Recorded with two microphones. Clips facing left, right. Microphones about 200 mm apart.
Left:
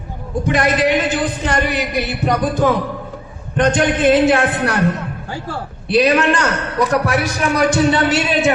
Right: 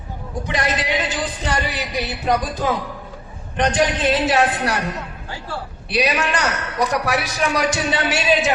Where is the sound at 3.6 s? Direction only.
55° left (ahead or behind).